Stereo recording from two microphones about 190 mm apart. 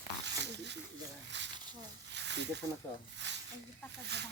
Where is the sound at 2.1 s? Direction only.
65° right (ahead or behind).